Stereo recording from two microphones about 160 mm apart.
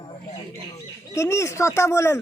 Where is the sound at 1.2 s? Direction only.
20° left (ahead or behind).